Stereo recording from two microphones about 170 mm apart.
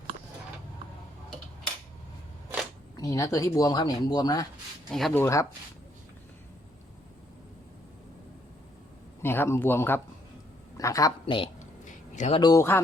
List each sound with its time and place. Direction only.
2.9 s speech: 20° left (ahead or behind)
4.9 s speech: centre (ahead or behind)
5.1 s speech: 15° left (ahead or behind)
9.2 s a man's voice: 15° left (ahead or behind)
11.9 s a sound: 45° left (ahead or behind)
12.4 s speech: 20° left (ahead or behind)